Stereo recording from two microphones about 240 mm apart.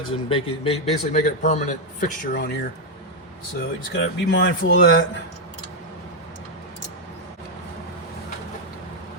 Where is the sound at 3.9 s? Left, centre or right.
Left.